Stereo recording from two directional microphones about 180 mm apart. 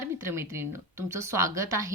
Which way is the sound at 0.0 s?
15° right (ahead or behind).